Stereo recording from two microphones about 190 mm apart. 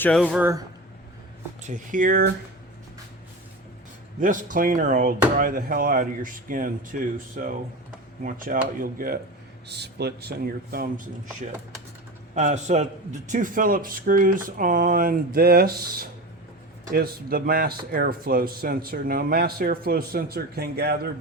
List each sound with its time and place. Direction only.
0.0 s speech: 5° left (ahead or behind)
0.3 s speech: 10° right (ahead or behind)
1.6 s speech: 45° right (ahead or behind)
4.2 s speech: 45° right (ahead or behind)
9.6 s speech: 60° right (ahead or behind)